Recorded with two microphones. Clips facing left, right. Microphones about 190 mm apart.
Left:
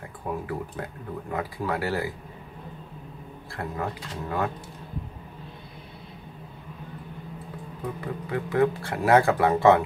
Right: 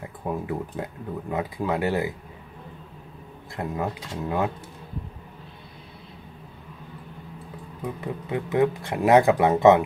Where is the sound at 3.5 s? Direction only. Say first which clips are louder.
Right 3 dB; 20° right (ahead or behind).